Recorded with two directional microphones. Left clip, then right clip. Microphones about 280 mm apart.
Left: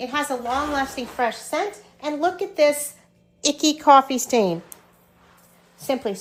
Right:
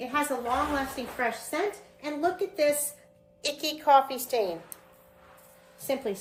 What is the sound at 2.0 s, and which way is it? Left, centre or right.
A woman's voice, centre.